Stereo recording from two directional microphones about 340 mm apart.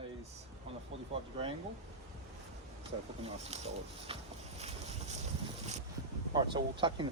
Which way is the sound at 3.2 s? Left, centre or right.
Centre.